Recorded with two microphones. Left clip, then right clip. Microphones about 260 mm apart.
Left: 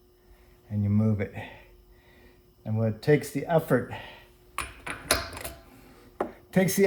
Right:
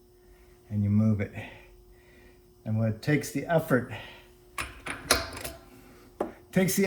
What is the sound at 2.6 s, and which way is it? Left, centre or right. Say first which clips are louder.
Speech: left 2 dB; left.